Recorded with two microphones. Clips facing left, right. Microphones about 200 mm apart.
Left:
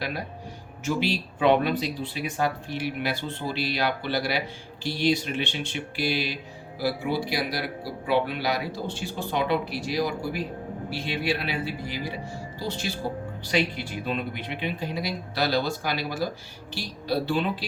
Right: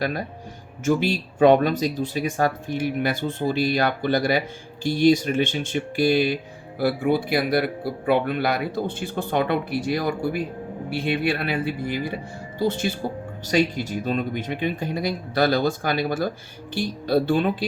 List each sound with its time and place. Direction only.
0.9 s speech: 50° right (ahead or behind)